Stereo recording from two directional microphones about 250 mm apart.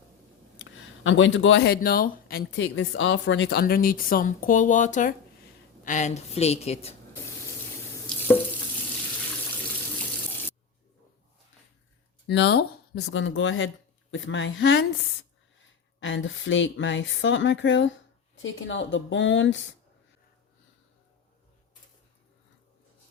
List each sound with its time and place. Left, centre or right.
0.6 s a woman's voice: left
12.3 s speech: left
16.0 s speech: left